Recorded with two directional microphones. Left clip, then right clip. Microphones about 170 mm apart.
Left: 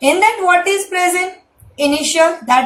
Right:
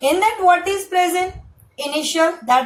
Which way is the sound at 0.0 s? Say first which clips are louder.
Left 3 dB; 30° right (ahead or behind).